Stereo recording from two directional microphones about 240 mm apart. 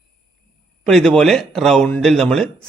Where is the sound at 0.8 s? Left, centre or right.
Centre.